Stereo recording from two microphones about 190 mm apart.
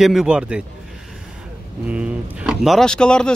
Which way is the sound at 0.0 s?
Centre (ahead or behind).